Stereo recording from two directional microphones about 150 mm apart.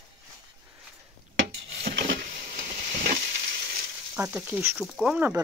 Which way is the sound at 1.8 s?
75° right (ahead or behind).